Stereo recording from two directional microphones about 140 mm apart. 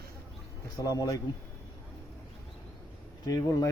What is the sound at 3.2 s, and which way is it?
Speech, 25° left (ahead or behind).